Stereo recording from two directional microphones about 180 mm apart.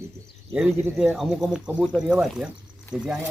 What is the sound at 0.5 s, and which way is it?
Speech, 5° right (ahead or behind).